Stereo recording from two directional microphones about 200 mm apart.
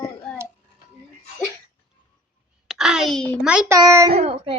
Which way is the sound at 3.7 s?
15° right (ahead or behind).